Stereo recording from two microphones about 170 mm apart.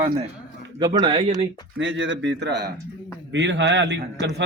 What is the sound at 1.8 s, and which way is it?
A man's voice, 90° right.